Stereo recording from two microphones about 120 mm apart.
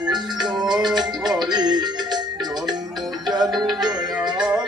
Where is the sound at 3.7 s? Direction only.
5° right (ahead or behind).